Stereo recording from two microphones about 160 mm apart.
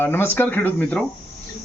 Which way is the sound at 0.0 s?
15° left (ahead or behind).